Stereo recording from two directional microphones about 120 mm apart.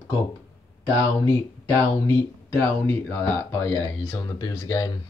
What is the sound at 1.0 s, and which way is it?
Speech, 25° left (ahead or behind).